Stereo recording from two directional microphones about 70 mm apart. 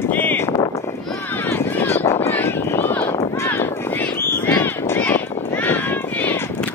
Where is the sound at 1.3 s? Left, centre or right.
Left.